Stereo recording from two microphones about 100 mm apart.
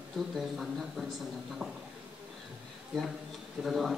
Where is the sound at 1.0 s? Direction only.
5° right (ahead or behind).